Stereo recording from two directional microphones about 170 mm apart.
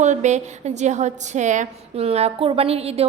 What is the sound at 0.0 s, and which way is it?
A woman's voice, 45° right (ahead or behind).